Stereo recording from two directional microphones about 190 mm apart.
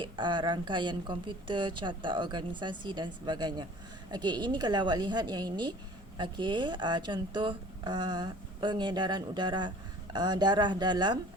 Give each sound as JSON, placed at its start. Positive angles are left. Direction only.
{"t": 0.0, "sound": "speech", "side_deg": -25}